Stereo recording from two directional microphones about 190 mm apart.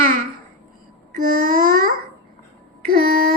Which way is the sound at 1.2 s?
50° right (ahead or behind).